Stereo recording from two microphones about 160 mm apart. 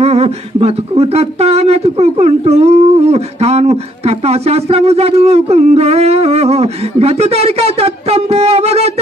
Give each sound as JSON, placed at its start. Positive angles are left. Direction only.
{"t": 0.0, "sound": "speech", "side_deg": -40}